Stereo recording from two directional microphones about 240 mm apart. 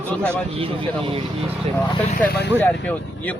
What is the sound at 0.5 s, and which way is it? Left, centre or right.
Speech, right.